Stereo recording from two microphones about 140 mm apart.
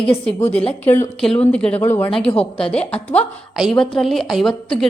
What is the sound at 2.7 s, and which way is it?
A woman's voice, 10° left (ahead or behind).